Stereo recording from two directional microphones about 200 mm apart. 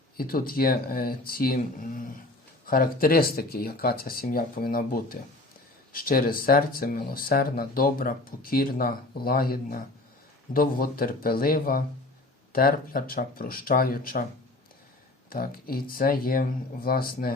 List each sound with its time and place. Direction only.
0.2 s speech: 45° left (ahead or behind)
15.3 s speech: 45° left (ahead or behind)